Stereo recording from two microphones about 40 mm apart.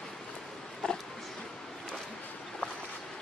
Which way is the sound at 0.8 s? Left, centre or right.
Left.